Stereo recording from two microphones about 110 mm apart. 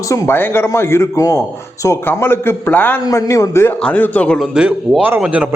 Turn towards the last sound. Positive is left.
turn(degrees=-10)  # may be behind; listen again after turning